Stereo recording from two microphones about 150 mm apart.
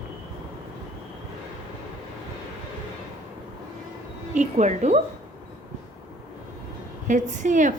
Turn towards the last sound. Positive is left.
turn(degrees=-55)  # may be behind; listen again after turning